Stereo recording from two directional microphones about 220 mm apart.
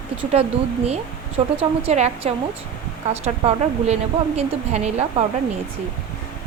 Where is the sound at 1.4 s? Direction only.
25° right (ahead or behind).